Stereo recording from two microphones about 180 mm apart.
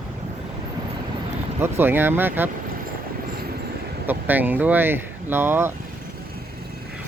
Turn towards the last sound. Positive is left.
turn(degrees=-15)  # may be behind; listen again after turning